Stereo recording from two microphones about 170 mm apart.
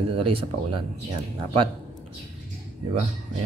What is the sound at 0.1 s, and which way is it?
Speech, 30° right (ahead or behind).